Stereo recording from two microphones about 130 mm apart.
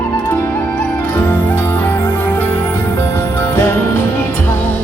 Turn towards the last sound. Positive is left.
turn(degrees=15)  # may be behind; listen again after turning